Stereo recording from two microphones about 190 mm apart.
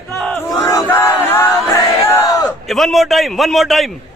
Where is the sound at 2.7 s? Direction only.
Centre (ahead or behind).